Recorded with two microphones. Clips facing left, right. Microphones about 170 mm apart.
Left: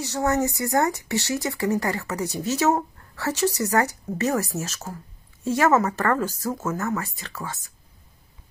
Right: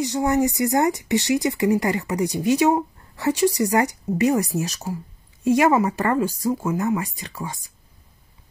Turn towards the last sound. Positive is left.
turn(degrees=-15)  # may be behind; listen again after turning